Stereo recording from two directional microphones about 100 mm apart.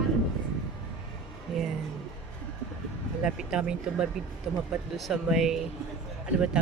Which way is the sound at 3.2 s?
10° right (ahead or behind).